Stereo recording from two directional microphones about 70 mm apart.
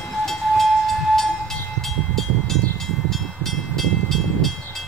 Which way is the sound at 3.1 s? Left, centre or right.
Centre.